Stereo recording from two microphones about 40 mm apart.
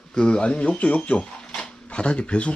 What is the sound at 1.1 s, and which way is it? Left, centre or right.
Speech, left.